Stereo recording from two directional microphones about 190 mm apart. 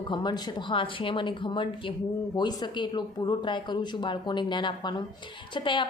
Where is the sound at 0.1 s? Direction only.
20° left (ahead or behind).